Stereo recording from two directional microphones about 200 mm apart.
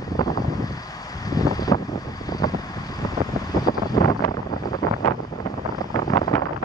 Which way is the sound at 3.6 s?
20° left (ahead or behind).